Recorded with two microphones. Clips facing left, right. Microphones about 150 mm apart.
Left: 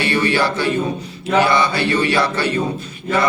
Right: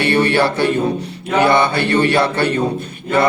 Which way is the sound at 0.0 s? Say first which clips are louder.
Right 3 dB; 60° right (ahead or behind).